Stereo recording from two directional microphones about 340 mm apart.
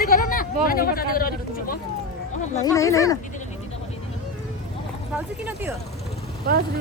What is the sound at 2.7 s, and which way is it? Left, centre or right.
Speech, centre.